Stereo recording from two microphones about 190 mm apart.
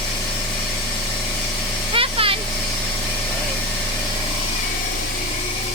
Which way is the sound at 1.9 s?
30° right (ahead or behind).